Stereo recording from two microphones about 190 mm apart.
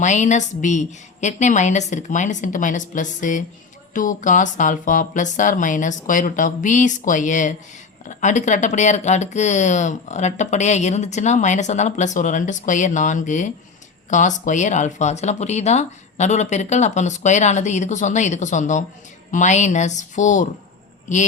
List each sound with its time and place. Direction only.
0.0 s speech: 40° left (ahead or behind)